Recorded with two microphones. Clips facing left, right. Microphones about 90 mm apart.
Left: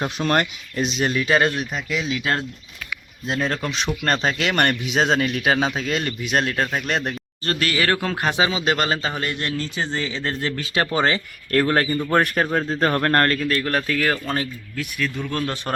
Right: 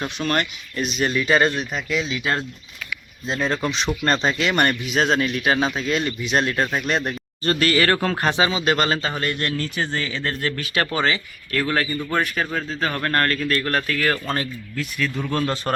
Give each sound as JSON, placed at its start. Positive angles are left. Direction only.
{"t": 0.3, "sound": "a man's voice", "side_deg": 25}
{"t": 1.0, "sound": "speech", "side_deg": 5}
{"t": 3.4, "sound": "speech", "side_deg": -10}
{"t": 3.7, "sound": "a man's voice", "side_deg": 5}
{"t": 10.9, "sound": "speech", "side_deg": 35}
{"t": 12.1, "sound": "speech", "side_deg": 50}
{"t": 13.4, "sound": "speech", "side_deg": 10}
{"t": 15.2, "sound": "speech", "side_deg": -10}